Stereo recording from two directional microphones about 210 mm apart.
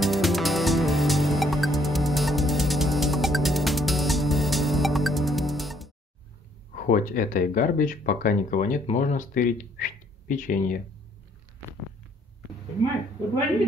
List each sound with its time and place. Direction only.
0.0 s music: centre (ahead or behind)
6.7 s speech: 40° left (ahead or behind)